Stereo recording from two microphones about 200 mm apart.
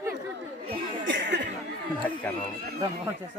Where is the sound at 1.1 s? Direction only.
65° right (ahead or behind).